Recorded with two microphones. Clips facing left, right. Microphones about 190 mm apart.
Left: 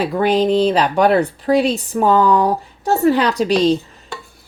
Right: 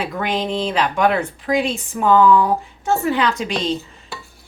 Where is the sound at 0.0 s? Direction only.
35° left (ahead or behind).